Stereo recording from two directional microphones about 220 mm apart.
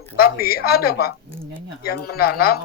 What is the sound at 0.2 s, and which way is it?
Speech, 45° left (ahead or behind).